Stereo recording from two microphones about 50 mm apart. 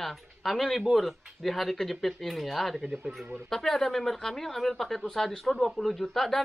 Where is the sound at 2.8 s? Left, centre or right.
Centre.